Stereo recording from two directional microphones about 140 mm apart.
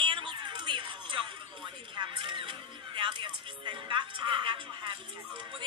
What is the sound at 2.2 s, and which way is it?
Music, 35° right (ahead or behind).